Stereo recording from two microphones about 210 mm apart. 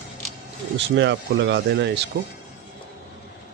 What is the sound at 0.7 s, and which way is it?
Speech, 60° right (ahead or behind).